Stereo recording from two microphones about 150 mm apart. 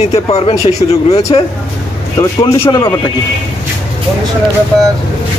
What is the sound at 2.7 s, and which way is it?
Speech, 25° left (ahead or behind).